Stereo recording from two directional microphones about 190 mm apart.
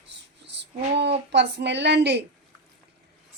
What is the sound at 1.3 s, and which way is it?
Speech, 65° right (ahead or behind).